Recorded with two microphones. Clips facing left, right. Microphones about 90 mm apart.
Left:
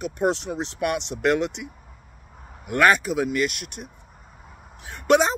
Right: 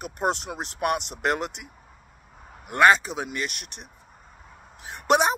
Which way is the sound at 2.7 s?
25° right (ahead or behind).